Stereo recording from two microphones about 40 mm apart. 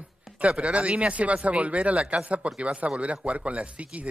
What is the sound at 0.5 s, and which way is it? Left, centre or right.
Speech, right.